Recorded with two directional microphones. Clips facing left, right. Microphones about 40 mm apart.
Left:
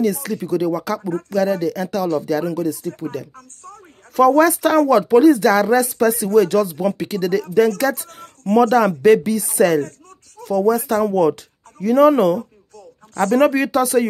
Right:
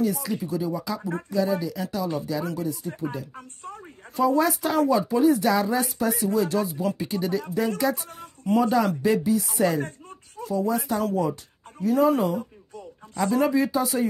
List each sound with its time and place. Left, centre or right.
0.3 s speech: left
3.0 s speech: left
3.3 s a sound: right
4.1 s speech: left
7.5 s speech: left
9.8 s a sound: centre
10.4 s speech: left
13.1 s speech: left